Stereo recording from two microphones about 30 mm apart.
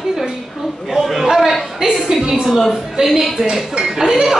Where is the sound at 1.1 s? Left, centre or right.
Centre.